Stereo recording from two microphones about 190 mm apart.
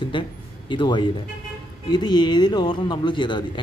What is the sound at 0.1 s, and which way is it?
Speech, 25° left (ahead or behind).